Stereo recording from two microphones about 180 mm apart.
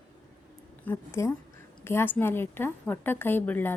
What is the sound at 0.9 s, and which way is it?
A woman's voice, 20° left (ahead or behind).